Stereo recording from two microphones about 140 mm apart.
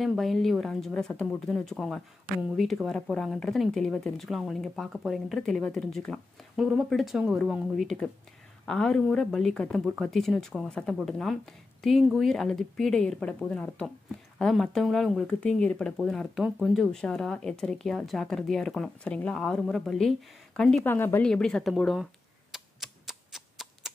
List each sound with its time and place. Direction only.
0.0 s speech: centre (ahead or behind)
20.8 s a woman's voice: 15° left (ahead or behind)
21.3 s speech: 5° left (ahead or behind)
22.5 s a sound: centre (ahead or behind)